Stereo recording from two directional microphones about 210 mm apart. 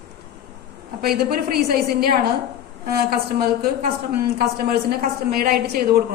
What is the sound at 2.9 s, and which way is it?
A woman's voice, 45° right (ahead or behind).